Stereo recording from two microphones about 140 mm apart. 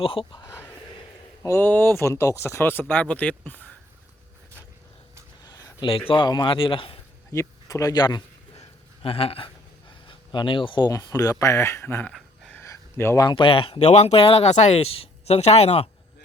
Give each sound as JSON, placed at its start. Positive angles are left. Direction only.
{"t": 0.0, "sound": "a man's voice", "side_deg": 40}
{"t": 1.4, "sound": "speech", "side_deg": 15}
{"t": 5.5, "sound": "a sound", "side_deg": 30}
{"t": 6.1, "sound": "a man's voice", "side_deg": 35}
{"t": 7.3, "sound": "speech", "side_deg": 20}
{"t": 9.0, "sound": "speech", "side_deg": 45}
{"t": 12.1, "sound": "a sound", "side_deg": 0}
{"t": 12.5, "sound": "a sound", "side_deg": 20}
{"t": 13.2, "sound": "speech", "side_deg": 40}